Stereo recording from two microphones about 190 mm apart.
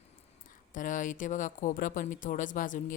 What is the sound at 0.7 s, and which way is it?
A woman's voice, 40° left (ahead or behind).